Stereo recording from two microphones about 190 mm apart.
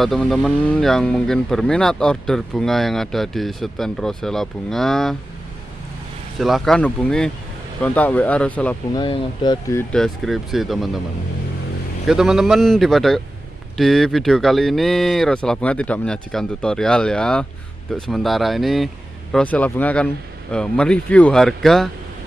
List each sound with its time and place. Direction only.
0.0 s speech: centre (ahead or behind)
6.4 s speech: centre (ahead or behind)
8.9 s speech: 25° left (ahead or behind)
9.9 s speech: centre (ahead or behind)
12.1 s speech: centre (ahead or behind)